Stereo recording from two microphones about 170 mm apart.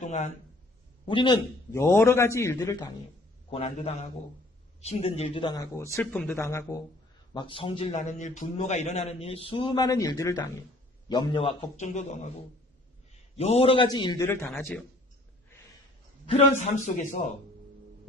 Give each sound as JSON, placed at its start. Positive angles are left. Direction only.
{"t": 0.0, "sound": "a sound", "side_deg": 45}
{"t": 1.0, "sound": "a man's voice", "side_deg": 30}
{"t": 1.7, "sound": "a man's voice", "side_deg": 15}
{"t": 3.5, "sound": "a man's voice", "side_deg": 35}
{"t": 7.3, "sound": "a man's voice", "side_deg": 30}
{"t": 11.8, "sound": "a man's voice", "side_deg": 45}
{"t": 13.3, "sound": "a man's voice", "side_deg": 40}
{"t": 14.3, "sound": "a man's voice", "side_deg": 15}
{"t": 16.2, "sound": "a man's voice", "side_deg": 40}